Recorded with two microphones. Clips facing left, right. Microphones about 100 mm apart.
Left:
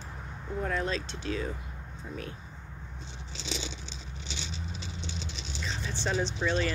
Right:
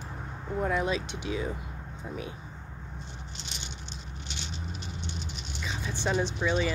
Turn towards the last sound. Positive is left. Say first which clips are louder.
# right 1 dB
turn(degrees=-10)  # may be behind; listen again after turning